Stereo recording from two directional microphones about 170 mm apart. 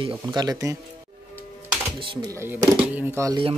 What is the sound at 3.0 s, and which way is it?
Speech, 15° right (ahead or behind).